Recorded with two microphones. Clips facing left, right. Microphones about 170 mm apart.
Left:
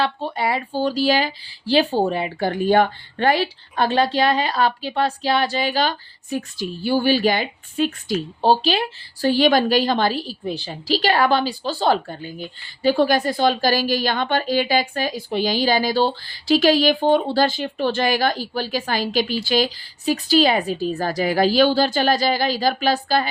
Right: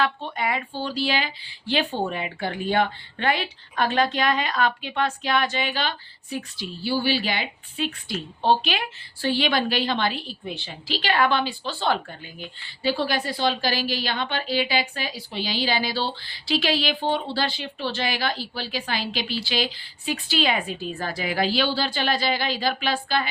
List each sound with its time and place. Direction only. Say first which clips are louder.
0.0 s a woman's voice: left 3 dB; 35° left (ahead or behind)